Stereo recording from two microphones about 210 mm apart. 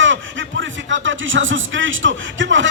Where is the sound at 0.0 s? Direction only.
65° right (ahead or behind).